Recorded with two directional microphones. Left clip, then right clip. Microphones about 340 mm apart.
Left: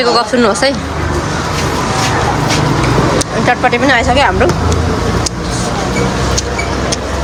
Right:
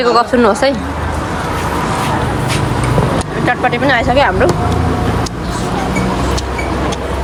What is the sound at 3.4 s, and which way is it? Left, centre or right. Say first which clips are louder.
Speech: left 2 dB; centre.